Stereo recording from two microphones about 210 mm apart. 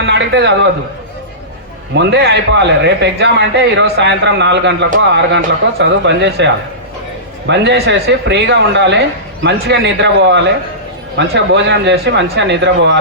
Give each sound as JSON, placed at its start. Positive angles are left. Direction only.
{"t": 0.0, "sound": "a man's voice", "side_deg": -55}
{"t": 2.0, "sound": "speech", "side_deg": -55}